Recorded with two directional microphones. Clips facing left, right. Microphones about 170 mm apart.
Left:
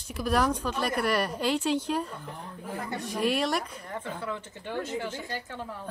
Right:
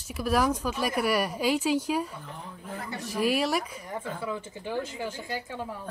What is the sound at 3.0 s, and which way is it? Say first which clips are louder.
A woman's voice: right 1 dB; 5° right (ahead or behind).